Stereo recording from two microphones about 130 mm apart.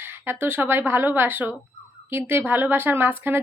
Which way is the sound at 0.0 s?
15° right (ahead or behind).